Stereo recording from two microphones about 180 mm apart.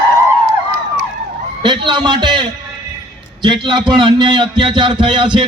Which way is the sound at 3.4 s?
25° right (ahead or behind).